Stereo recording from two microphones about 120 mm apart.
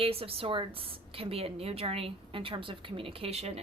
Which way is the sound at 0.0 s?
55° right (ahead or behind).